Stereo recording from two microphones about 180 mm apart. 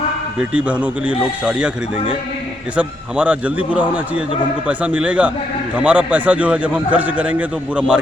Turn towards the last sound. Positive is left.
turn(degrees=-5)  # may be behind; listen again after turning